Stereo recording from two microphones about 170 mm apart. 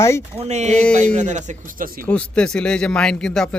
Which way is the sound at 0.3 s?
40° right (ahead or behind).